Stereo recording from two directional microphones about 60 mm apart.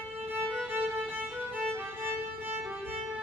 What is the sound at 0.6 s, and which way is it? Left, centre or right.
Music, right.